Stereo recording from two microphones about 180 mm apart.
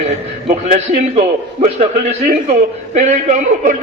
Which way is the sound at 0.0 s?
40° right (ahead or behind).